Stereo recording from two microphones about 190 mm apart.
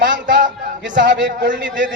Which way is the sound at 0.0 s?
75° right (ahead or behind).